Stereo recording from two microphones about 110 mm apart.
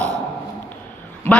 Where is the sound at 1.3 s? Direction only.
10° left (ahead or behind).